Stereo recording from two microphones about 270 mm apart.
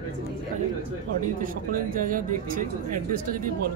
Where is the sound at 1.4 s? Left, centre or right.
Right.